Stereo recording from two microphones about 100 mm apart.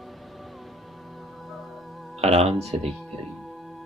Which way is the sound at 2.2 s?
90° right.